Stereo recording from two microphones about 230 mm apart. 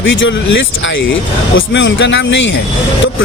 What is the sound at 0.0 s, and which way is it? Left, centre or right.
Speech, left.